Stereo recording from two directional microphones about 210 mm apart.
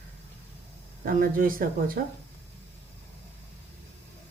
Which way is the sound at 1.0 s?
40° right (ahead or behind).